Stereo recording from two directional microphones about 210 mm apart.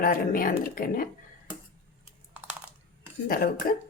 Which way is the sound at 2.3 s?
5° right (ahead or behind).